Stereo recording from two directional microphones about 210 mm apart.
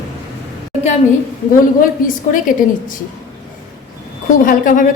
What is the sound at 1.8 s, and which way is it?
A woman's voice, 40° left (ahead or behind).